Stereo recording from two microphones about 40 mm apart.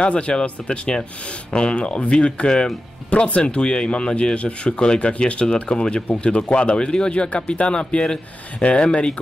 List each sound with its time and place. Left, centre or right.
0.0 s speech: left
3.1 s speech: left